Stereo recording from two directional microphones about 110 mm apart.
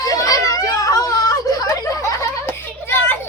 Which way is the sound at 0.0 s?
35° left (ahead or behind).